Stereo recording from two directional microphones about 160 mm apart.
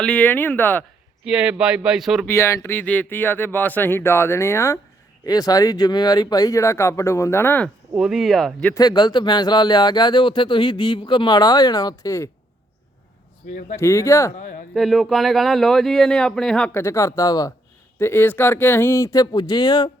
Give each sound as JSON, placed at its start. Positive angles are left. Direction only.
{"t": 0.0, "sound": "speech", "side_deg": 5}
{"t": 1.2, "sound": "speech", "side_deg": -5}
{"t": 2.2, "sound": "speech", "side_deg": 15}
{"t": 7.9, "sound": "speech", "side_deg": -5}
{"t": 8.7, "sound": "speech", "side_deg": 25}
{"t": 13.7, "sound": "speech", "side_deg": 20}
{"t": 14.3, "sound": "speech", "side_deg": 55}
{"t": 14.7, "sound": "speech", "side_deg": 0}